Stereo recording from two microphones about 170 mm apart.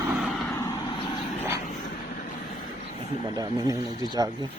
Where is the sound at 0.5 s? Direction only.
20° left (ahead or behind).